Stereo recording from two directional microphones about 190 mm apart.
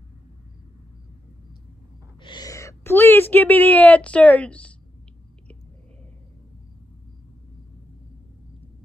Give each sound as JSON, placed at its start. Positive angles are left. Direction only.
{"t": 2.2, "sound": "speech", "side_deg": 20}